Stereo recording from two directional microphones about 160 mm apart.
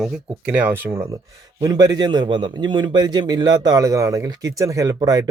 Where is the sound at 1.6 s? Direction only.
25° right (ahead or behind).